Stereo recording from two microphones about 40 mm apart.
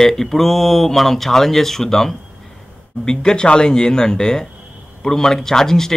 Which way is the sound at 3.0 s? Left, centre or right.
Left.